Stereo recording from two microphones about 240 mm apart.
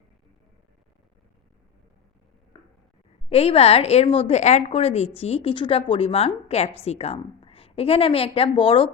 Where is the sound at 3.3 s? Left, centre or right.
Left.